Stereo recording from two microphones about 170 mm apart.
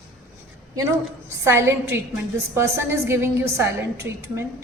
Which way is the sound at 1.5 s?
15° right (ahead or behind).